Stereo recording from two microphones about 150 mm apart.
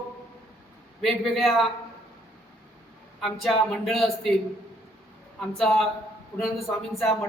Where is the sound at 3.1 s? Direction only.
Centre (ahead or behind).